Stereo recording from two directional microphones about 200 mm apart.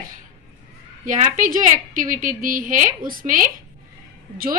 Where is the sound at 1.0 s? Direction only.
40° right (ahead or behind).